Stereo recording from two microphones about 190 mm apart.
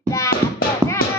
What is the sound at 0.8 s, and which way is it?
Music, 20° right (ahead or behind).